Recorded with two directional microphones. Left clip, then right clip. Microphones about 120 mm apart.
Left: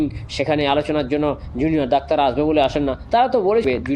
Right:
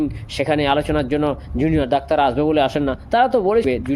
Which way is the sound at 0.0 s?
40° right (ahead or behind).